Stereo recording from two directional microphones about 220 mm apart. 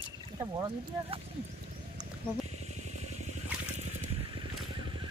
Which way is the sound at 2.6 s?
30° right (ahead or behind).